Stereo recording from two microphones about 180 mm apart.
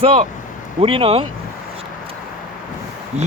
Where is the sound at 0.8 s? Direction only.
30° right (ahead or behind).